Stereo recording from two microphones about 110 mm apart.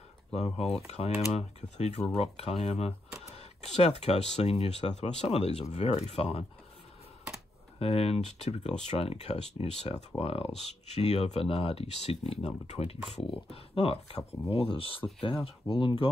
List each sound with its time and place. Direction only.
0.3 s speech: 70° left (ahead or behind)
7.8 s speech: 65° left (ahead or behind)